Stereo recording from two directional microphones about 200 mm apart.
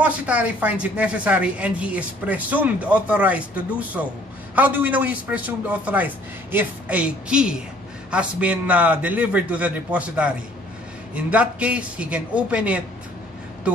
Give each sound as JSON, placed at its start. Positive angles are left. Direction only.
{"t": 0.0, "sound": "a woman's voice", "side_deg": -5}